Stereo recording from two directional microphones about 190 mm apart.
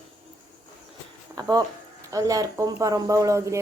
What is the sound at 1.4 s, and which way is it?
Speech, 20° right (ahead or behind).